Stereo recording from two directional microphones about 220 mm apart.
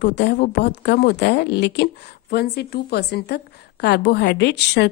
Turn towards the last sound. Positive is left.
turn(degrees=50)  # may be behind; listen again after turning